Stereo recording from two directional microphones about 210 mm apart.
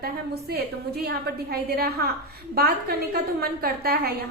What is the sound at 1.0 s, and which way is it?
A woman's voice, 45° right (ahead or behind).